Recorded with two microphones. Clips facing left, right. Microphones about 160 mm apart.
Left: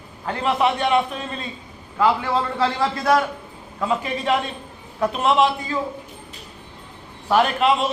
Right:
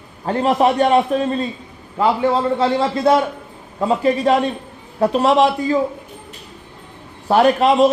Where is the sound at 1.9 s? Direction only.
25° right (ahead or behind).